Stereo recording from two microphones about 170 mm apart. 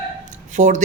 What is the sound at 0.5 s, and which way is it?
Speech, 45° right (ahead or behind).